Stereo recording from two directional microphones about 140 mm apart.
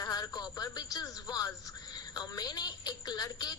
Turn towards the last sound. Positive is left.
turn(degrees=30)  # may be behind; listen again after turning